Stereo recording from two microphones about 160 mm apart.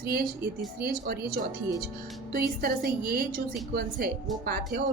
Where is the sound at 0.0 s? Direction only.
70° right (ahead or behind).